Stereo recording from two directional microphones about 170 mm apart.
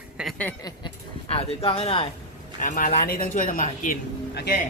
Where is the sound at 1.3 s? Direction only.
35° left (ahead or behind).